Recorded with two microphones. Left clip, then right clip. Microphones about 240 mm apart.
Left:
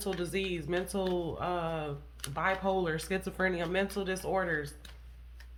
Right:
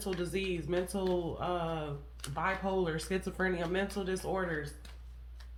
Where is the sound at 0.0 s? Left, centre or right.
Left.